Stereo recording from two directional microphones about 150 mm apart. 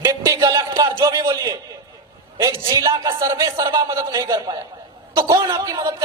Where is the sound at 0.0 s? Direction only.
25° right (ahead or behind).